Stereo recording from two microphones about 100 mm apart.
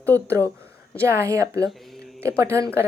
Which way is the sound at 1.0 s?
30° right (ahead or behind).